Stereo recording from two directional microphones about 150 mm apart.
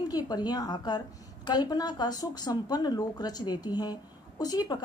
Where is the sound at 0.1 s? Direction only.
25° left (ahead or behind).